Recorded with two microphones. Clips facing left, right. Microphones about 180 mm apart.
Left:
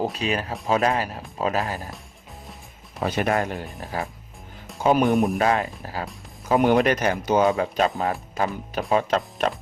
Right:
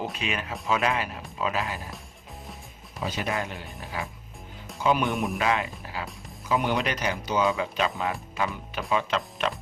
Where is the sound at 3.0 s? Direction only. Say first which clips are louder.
Left 7 dB; 55° left (ahead or behind).